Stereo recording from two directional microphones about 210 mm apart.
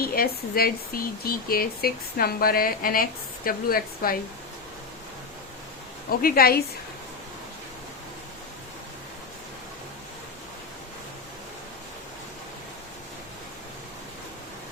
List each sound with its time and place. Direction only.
0.0 s speech: 45° left (ahead or behind)
6.1 s speech: 45° left (ahead or behind)